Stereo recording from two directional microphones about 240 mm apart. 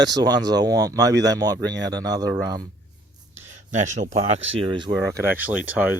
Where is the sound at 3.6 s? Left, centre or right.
Right.